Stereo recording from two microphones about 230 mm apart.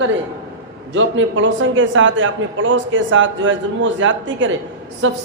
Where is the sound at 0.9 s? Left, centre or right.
Right.